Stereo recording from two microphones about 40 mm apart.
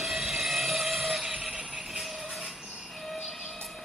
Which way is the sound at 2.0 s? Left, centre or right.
Centre.